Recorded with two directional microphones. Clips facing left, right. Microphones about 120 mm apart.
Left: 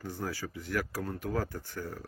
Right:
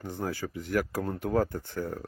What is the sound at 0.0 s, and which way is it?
Speech, 20° right (ahead or behind).